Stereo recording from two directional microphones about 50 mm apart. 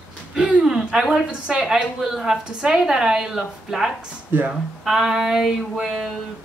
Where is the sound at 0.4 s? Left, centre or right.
Centre.